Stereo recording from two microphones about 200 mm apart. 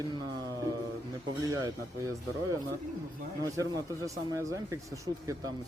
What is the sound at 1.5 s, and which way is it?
Speech, 15° right (ahead or behind).